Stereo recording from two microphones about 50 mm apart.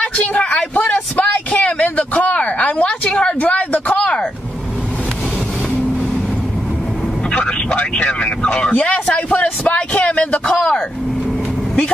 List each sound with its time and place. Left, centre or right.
0.0 s a sound: left
7.2 s vehicle: centre
8.0 s a man's voice: centre